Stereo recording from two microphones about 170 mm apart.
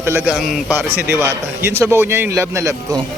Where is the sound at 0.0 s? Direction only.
15° right (ahead or behind).